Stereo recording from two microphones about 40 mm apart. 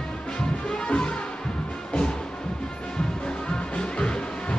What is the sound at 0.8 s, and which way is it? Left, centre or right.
Music, left.